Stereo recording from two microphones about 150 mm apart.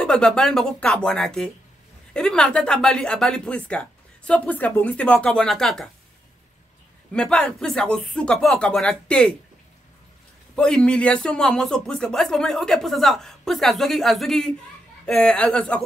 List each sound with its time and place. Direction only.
0.0 s speech: 5° left (ahead or behind)
7.1 s speech: 5° left (ahead or behind)
10.5 s speech: 5° left (ahead or behind)